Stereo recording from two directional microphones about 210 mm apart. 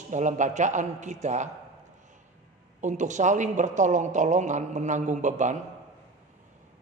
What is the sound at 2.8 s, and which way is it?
A woman's voice, 35° right (ahead or behind).